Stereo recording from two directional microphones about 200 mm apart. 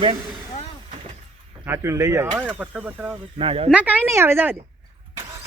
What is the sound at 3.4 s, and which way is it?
Speech, 30° right (ahead or behind).